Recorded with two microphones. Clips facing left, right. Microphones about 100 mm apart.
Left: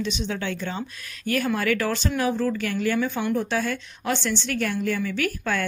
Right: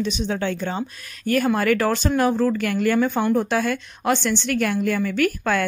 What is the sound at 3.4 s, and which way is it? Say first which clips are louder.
A woman's voice: right 4 dB; 55° right (ahead or behind).